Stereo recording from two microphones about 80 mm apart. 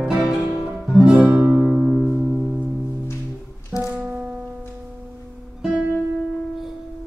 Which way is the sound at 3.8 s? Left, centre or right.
Centre.